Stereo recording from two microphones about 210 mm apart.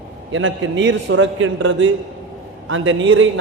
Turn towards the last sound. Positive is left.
turn(degrees=-70)  # may be behind; listen again after turning